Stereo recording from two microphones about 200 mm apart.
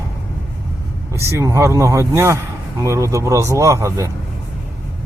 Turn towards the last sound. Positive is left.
turn(degrees=-15)  # may be behind; listen again after turning